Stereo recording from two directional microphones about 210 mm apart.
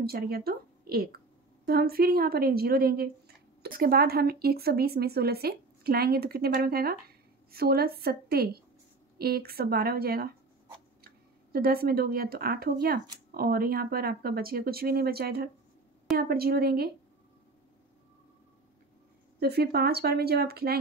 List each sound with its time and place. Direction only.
0.0 s a woman's voice: 45° right (ahead or behind)
11.5 s a woman's voice: 45° right (ahead or behind)
19.4 s a woman's voice: 50° right (ahead or behind)